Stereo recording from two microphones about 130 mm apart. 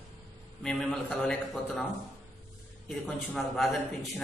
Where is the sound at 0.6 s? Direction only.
5° left (ahead or behind).